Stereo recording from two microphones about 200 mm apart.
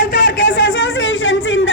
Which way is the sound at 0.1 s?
60° left (ahead or behind).